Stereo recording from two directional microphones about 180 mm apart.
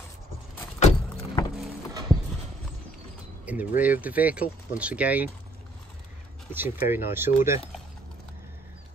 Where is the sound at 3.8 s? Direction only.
10° right (ahead or behind).